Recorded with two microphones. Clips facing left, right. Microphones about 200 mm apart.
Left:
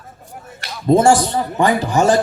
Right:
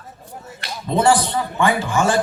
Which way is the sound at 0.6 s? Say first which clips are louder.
Left 7 dB; 45° left (ahead or behind).